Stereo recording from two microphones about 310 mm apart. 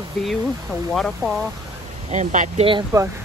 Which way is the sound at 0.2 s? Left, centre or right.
Centre.